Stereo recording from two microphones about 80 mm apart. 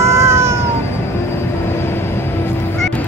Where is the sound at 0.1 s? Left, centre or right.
Right.